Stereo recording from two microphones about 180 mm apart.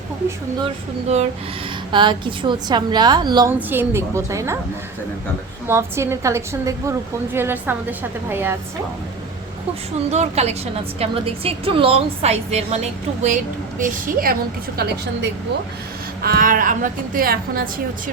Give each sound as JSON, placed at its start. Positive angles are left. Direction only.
{"t": 1.0, "sound": "a woman's voice", "side_deg": -35}
{"t": 1.9, "sound": "a woman's voice", "side_deg": -25}
{"t": 3.7, "sound": "a woman's voice", "side_deg": -15}
{"t": 5.6, "sound": "a woman's voice", "side_deg": -15}
{"t": 10.1, "sound": "a woman's voice", "side_deg": -35}
{"t": 14.8, "sound": "a woman's voice", "side_deg": -65}
{"t": 16.2, "sound": "a woman's voice", "side_deg": -50}